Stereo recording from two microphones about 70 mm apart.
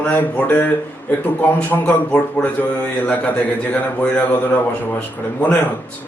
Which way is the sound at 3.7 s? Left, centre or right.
Centre.